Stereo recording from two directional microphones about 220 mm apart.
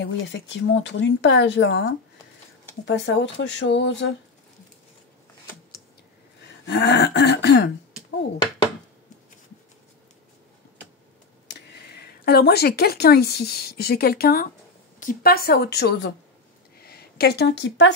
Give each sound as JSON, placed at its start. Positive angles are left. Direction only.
{"t": 0.0, "sound": "speech", "side_deg": 55}
{"t": 6.6, "sound": "throat clearing", "side_deg": 50}
{"t": 11.4, "sound": "speech", "side_deg": 50}
{"t": 15.0, "sound": "throat clearing", "side_deg": 40}
{"t": 16.7, "sound": "speech", "side_deg": 45}